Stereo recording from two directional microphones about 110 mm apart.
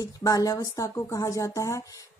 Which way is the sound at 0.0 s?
35° left (ahead or behind).